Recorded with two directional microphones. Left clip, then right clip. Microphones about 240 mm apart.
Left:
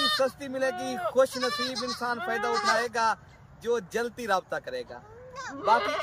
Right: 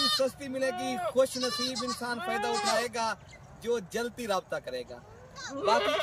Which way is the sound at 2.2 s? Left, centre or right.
Centre.